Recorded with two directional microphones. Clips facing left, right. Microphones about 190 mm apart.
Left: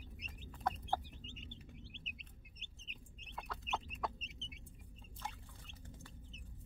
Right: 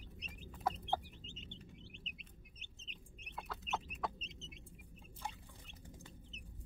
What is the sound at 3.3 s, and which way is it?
Chicken, centre (ahead or behind).